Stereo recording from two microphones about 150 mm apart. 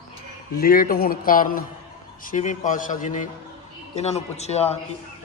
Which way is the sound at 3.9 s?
45° left (ahead or behind).